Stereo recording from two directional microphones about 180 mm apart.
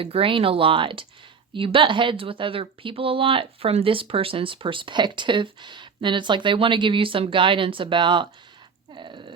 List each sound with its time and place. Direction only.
0.0 s speech: 30° right (ahead or behind)